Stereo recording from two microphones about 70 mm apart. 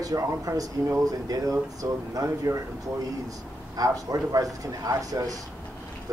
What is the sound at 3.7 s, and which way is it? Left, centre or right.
A man's voice, right.